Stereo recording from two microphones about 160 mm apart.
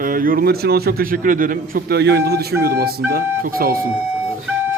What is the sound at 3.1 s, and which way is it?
Speech, 65° right (ahead or behind).